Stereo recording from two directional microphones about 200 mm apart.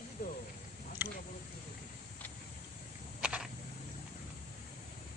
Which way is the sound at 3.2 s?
5° right (ahead or behind).